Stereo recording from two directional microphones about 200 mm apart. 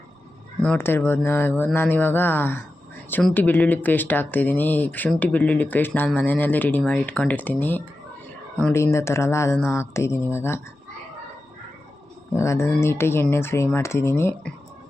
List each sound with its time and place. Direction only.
0.6 s speech: 10° left (ahead or behind)
12.3 s speech: 15° left (ahead or behind)